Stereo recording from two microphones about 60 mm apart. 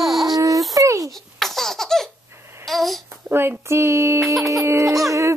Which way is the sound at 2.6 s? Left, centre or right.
Centre.